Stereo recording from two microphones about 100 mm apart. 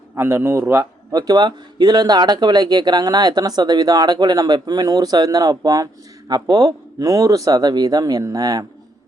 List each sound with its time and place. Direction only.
0.2 s a man's voice: 25° right (ahead or behind)